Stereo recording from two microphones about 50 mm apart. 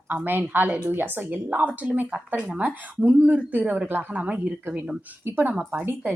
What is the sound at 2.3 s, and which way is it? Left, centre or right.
Speech, centre.